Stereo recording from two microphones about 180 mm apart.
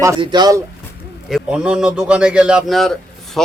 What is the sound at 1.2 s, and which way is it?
A man's voice, 5° right (ahead or behind).